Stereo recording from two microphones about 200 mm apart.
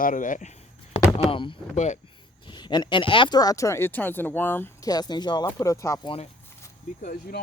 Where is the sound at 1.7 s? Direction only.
35° left (ahead or behind).